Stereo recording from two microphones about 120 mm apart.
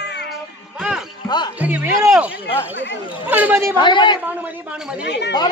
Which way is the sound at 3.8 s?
40° left (ahead or behind).